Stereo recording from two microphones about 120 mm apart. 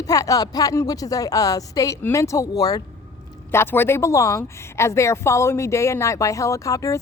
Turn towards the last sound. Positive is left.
turn(degrees=30)  # may be behind; listen again after turning